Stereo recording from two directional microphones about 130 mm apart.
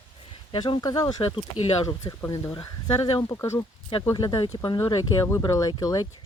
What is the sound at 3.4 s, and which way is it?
Speech, 25° left (ahead or behind).